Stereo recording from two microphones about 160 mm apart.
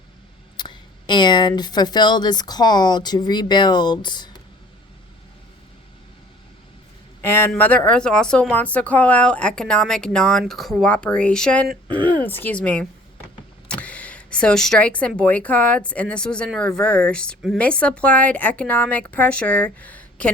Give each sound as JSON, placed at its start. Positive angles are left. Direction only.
{"t": 0.5, "sound": "speech", "side_deg": 30}
{"t": 7.2, "sound": "speech", "side_deg": 15}